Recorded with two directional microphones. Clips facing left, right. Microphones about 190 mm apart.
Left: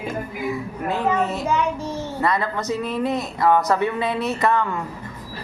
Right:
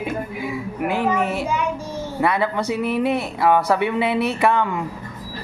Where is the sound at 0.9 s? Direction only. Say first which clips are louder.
Even; 10° right (ahead or behind).